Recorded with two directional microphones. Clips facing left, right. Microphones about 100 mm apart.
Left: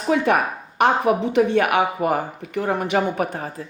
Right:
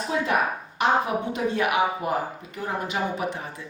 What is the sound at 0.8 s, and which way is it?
Speech, 70° left (ahead or behind).